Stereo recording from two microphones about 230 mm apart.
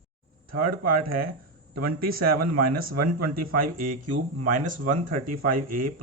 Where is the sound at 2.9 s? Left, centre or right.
Right.